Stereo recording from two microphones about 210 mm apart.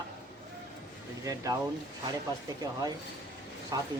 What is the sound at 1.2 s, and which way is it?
Speech, 15° right (ahead or behind).